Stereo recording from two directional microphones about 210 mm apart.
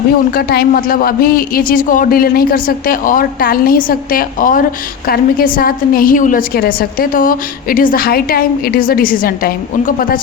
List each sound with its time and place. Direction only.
0.3 s a woman's voice: 45° left (ahead or behind)